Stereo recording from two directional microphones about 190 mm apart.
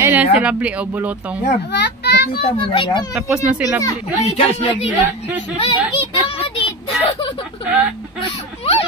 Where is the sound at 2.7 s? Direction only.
25° left (ahead or behind).